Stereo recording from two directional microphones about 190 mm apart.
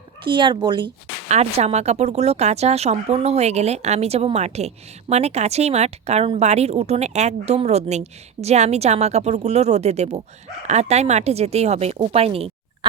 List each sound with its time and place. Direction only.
0.3 s speech: 25° right (ahead or behind)
1.3 s speech: 35° right (ahead or behind)